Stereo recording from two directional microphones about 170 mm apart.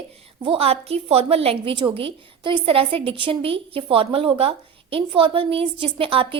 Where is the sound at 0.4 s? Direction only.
35° right (ahead or behind).